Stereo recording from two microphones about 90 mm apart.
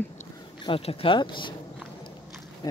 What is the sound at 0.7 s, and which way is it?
Speech, 90° left.